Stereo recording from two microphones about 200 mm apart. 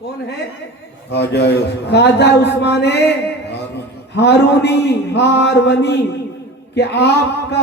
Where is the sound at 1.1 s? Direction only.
60° left (ahead or behind).